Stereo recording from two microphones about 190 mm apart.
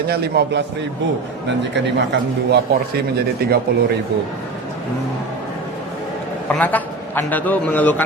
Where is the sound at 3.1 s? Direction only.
55° right (ahead or behind).